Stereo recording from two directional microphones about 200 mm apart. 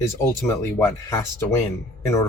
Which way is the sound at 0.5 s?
10° left (ahead or behind).